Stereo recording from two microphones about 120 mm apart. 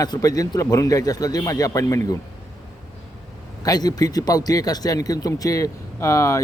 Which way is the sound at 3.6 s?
30° left (ahead or behind).